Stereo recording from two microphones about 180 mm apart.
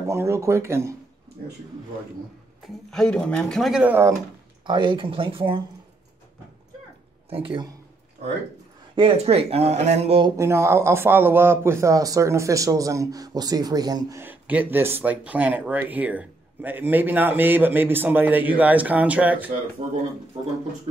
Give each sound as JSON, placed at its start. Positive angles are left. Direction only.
{"t": 0.1, "sound": "speech", "side_deg": -15}
{"t": 2.6, "sound": "speech", "side_deg": 0}
{"t": 4.6, "sound": "speech", "side_deg": -25}
{"t": 7.2, "sound": "speech", "side_deg": -30}
{"t": 8.9, "sound": "speech", "side_deg": -30}
{"t": 10.3, "sound": "speech", "side_deg": -15}
{"t": 14.2, "sound": "speech", "side_deg": -10}